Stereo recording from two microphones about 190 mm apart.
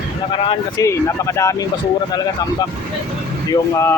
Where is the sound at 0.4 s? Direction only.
15° left (ahead or behind).